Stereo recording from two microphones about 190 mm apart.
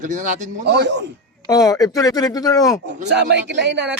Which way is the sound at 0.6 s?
60° right (ahead or behind).